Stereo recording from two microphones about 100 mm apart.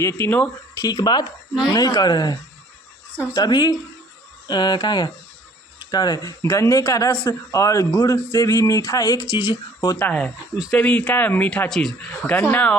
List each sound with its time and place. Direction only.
0.0 s speech: 25° left (ahead or behind)
0.8 s speech: 40° left (ahead or behind)
10.0 s speech: 15° left (ahead or behind)
12.2 s speech: 20° left (ahead or behind)